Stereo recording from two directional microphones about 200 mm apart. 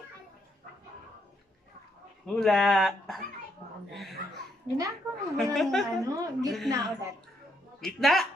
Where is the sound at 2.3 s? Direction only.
Centre (ahead or behind).